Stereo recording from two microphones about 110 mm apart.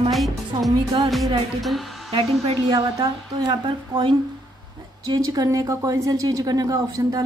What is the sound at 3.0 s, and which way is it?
A woman's voice, 40° right (ahead or behind).